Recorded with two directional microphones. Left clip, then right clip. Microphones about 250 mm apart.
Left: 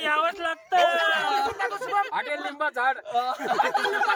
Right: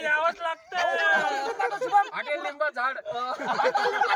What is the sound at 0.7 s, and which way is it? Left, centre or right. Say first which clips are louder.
Speech: left 3 dB; left.